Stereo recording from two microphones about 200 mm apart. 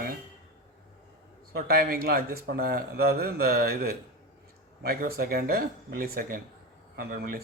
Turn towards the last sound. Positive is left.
turn(degrees=-50)  # may be behind; listen again after turning